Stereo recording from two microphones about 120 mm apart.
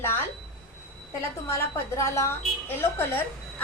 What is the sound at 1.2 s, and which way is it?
A woman's voice, 20° left (ahead or behind).